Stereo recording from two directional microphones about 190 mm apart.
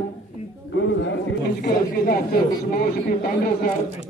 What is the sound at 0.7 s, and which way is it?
Speech, 70° left (ahead or behind).